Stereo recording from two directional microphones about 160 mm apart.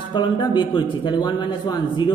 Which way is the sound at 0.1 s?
30° left (ahead or behind).